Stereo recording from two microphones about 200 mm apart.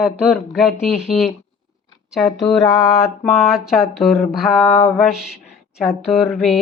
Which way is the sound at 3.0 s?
Centre (ahead or behind).